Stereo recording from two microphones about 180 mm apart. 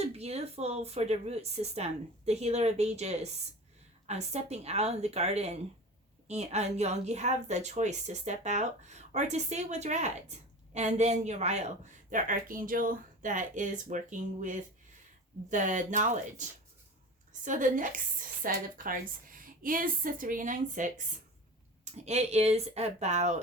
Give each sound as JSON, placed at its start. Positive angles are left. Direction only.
{"t": 0.0, "sound": "a woman's voice", "side_deg": -35}